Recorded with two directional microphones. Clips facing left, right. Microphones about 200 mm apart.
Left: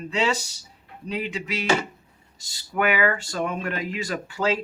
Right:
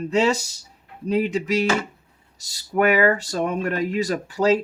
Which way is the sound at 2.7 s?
40° right (ahead or behind).